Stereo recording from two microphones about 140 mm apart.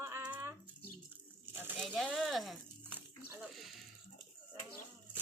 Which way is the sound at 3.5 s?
Centre (ahead or behind).